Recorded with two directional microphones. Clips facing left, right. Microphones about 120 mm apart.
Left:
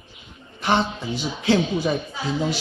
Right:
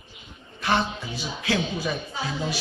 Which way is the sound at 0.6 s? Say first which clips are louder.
Left 3 dB; 25° left (ahead or behind).